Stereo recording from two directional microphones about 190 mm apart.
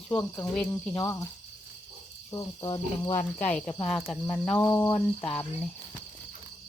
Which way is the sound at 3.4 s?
5° left (ahead or behind).